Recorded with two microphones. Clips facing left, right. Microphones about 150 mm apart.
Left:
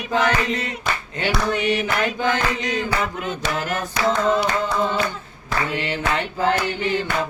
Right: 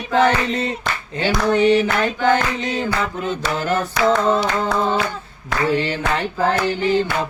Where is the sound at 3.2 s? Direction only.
30° right (ahead or behind).